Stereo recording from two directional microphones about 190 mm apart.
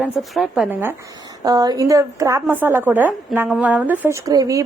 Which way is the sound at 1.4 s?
20° right (ahead or behind).